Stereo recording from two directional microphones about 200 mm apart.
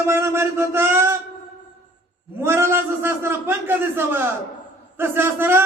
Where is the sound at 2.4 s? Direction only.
10° right (ahead or behind).